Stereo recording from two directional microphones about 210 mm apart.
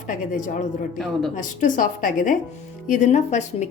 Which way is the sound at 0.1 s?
35° left (ahead or behind).